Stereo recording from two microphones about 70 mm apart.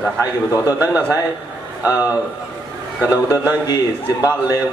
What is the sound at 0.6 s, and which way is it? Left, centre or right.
Speech, right.